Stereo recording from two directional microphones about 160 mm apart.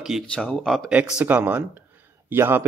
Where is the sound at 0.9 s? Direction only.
10° right (ahead or behind).